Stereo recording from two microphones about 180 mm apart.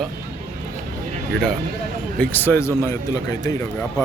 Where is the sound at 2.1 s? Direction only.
10° left (ahead or behind).